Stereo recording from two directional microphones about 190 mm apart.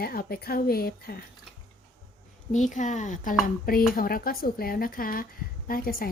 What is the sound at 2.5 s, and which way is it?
A woman's voice, 40° left (ahead or behind).